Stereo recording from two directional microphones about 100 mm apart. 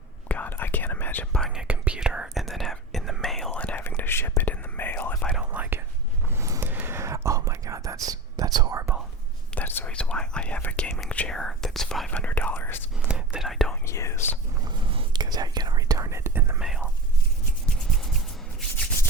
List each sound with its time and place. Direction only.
0.3 s whispering: 15° left (ahead or behind)
1.3 s speech: 5° left (ahead or behind)
1.5 s whispering: 15° right (ahead or behind); by 3.5 s 5° left (ahead or behind)
3.5 s whispering: 15° left (ahead or behind)
5.4 s whispering: 15° right (ahead or behind)
6.2 s a sound: 25° right (ahead or behind)
7.3 s whispering: 30° right (ahead or behind)
9.6 s whispering: 20° left (ahead or behind)
13.1 s whispering: 10° right (ahead or behind)
13.5 s whispering: centre (ahead or behind)
13.8 s whispering: 30° left (ahead or behind)
14.6 s whispering: 50° right (ahead or behind); by 16.6 s 25° right (ahead or behind)
16.6 s whispering: 5° right (ahead or behind)